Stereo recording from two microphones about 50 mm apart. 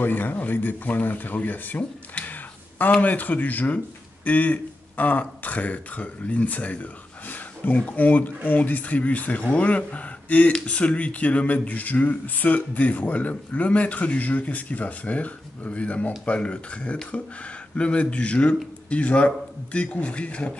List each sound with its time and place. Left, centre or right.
0.0 s a man's voice: left